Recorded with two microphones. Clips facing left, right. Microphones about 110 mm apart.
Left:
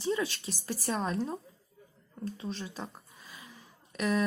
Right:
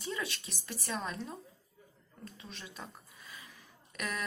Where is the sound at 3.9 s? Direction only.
25° left (ahead or behind).